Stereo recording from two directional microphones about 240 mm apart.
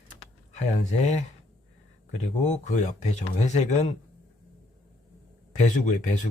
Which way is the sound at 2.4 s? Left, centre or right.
Left.